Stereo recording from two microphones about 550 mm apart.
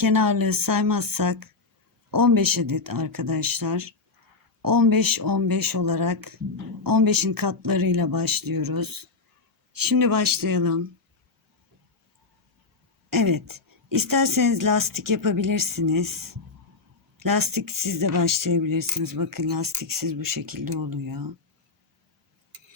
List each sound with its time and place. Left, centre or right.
0.0 s speech: right
13.1 s speech: right